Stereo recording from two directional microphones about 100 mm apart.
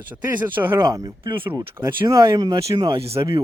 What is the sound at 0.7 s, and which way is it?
Speech, 40° right (ahead or behind).